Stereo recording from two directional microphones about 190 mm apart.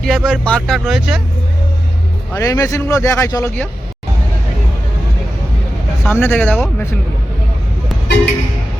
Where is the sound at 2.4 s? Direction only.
15° left (ahead or behind).